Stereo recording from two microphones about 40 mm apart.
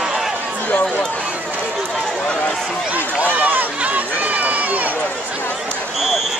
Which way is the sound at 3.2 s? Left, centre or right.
Right.